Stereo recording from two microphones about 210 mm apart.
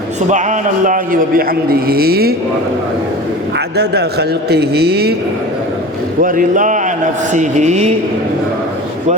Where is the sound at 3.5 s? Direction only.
50° right (ahead or behind).